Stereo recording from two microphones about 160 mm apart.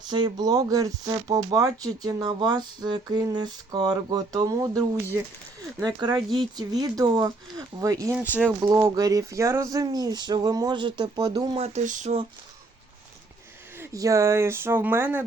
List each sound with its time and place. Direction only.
0.1 s speech: 25° right (ahead or behind)
5.8 s speech: 25° right (ahead or behind)
8.1 s speech: 10° right (ahead or behind)
8.6 s speech: 20° right (ahead or behind)
11.5 s speech: 45° right (ahead or behind)
13.7 s speech: 20° right (ahead or behind)